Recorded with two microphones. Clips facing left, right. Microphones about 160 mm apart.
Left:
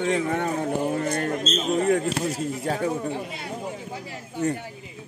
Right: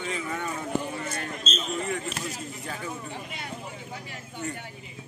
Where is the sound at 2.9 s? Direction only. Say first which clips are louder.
Left 8 dB; 45° left (ahead or behind).